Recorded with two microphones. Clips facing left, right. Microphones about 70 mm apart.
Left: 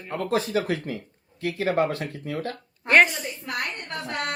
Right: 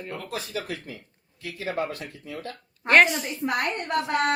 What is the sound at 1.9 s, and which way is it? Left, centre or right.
Speech, left.